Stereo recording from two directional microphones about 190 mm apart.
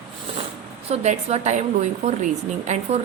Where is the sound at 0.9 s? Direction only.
35° right (ahead or behind).